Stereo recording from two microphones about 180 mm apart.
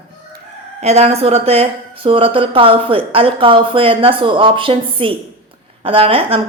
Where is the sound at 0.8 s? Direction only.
35° right (ahead or behind).